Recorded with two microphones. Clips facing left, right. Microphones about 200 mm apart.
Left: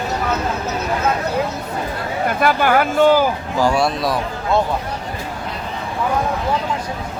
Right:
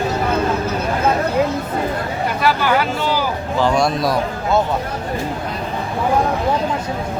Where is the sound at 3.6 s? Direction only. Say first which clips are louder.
Right 1 dB; 5° left (ahead or behind).